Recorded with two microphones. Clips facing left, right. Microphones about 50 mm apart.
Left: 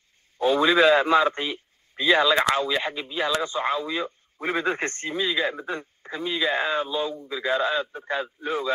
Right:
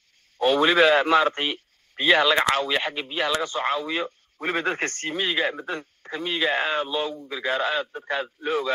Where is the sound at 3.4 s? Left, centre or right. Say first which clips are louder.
Even; right.